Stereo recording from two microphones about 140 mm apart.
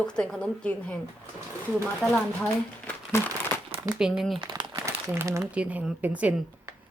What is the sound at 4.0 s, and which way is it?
Speech, 5° right (ahead or behind).